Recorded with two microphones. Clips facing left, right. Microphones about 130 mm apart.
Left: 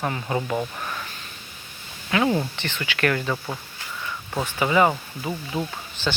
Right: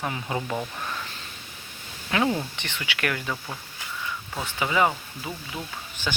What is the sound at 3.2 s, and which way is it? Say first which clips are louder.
Speech: left 5 dB; 15° left (ahead or behind).